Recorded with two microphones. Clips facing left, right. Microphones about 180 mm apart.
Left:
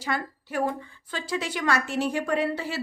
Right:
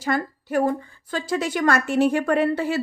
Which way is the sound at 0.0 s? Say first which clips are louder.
Right 6 dB; 45° right (ahead or behind).